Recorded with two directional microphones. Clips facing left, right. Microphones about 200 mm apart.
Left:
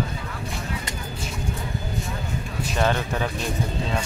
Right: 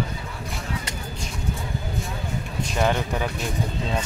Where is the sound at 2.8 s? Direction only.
15° right (ahead or behind).